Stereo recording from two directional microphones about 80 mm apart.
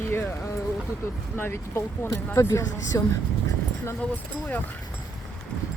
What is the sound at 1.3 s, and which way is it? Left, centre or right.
Speech, left.